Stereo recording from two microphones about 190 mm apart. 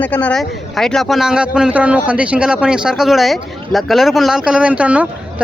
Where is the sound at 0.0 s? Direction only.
10° left (ahead or behind).